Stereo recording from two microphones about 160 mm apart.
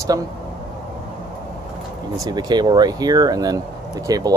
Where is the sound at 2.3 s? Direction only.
25° right (ahead or behind).